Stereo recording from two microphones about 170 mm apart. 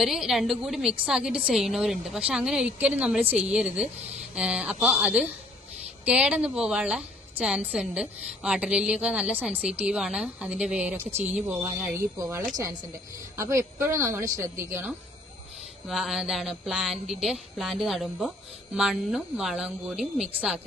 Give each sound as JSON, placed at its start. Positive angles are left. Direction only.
{"t": 0.0, "sound": "a woman's voice", "side_deg": 0}
{"t": 11.1, "sound": "speech", "side_deg": -40}
{"t": 11.3, "sound": "a woman's voice", "side_deg": -10}
{"t": 15.9, "sound": "a woman's voice", "side_deg": 0}